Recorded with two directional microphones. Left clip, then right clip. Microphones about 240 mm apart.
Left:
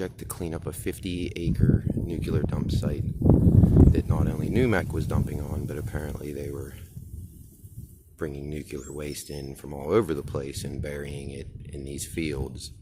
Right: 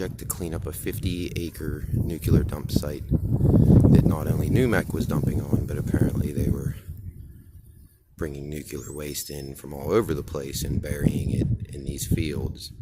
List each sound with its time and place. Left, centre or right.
0.0 s speech: centre
8.2 s speech: centre